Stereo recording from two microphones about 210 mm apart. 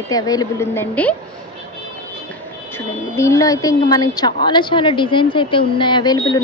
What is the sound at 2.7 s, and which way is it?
A woman's voice, 15° left (ahead or behind).